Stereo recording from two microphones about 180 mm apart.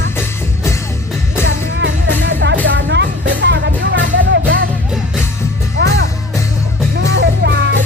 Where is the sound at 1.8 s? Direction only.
85° right.